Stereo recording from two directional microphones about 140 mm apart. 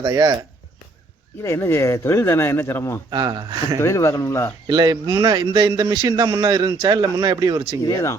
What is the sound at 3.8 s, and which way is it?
Speech, 20° left (ahead or behind).